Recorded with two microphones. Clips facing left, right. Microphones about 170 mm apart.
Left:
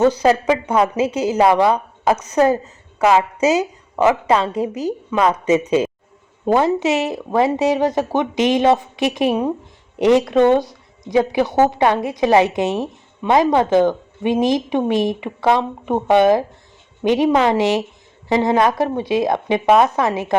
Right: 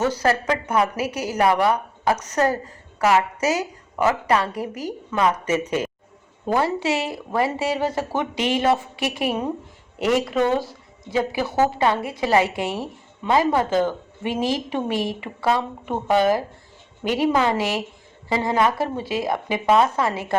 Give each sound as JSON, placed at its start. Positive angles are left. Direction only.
{"t": 0.0, "sound": "a woman's voice", "side_deg": 15}